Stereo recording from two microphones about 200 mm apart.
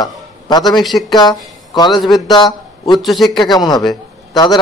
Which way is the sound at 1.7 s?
20° left (ahead or behind).